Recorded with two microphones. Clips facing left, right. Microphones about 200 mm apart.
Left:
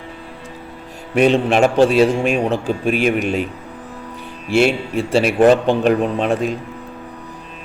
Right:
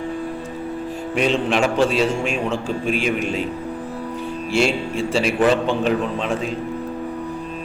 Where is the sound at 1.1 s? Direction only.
55° left (ahead or behind).